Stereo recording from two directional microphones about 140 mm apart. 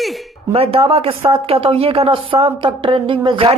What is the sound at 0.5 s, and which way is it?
Speech, 45° right (ahead or behind).